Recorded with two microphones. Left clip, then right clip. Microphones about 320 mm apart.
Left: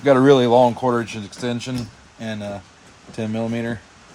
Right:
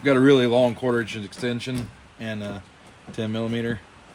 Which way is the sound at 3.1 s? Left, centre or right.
Centre.